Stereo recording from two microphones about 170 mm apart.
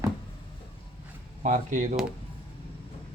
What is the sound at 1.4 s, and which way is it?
Speech, 50° right (ahead or behind).